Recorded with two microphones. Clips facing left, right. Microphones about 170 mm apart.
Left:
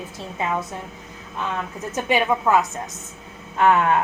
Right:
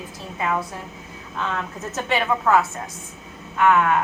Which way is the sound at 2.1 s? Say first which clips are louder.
Left 1 dB; 15° left (ahead or behind).